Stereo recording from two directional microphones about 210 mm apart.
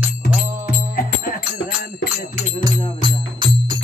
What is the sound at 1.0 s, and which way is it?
Music, 45° left (ahead or behind).